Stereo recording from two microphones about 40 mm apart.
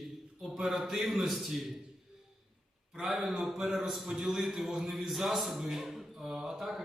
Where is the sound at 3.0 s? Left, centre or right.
Centre.